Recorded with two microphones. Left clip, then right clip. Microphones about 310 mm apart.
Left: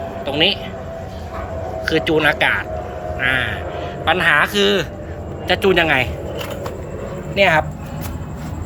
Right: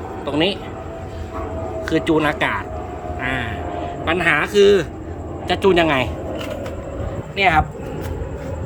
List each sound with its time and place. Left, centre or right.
0.3 s a man's voice: centre
1.8 s a man's voice: centre
7.3 s speech: centre